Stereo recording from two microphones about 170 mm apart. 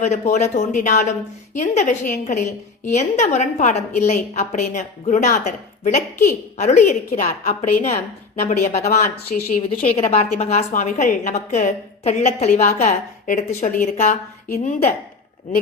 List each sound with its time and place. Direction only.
0.0 s a woman's voice: 45° left (ahead or behind)
9.9 s a woman's voice: 35° left (ahead or behind)